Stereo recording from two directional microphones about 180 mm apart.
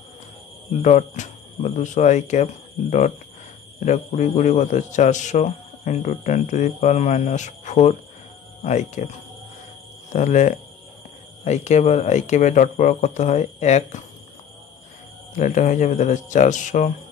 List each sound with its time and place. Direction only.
0.7 s a man's voice: 40° left (ahead or behind)
10.1 s a man's voice: 40° left (ahead or behind)
15.3 s speech: 40° left (ahead or behind)